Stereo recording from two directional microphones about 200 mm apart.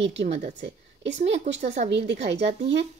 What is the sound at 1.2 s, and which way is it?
Speech, 35° right (ahead or behind).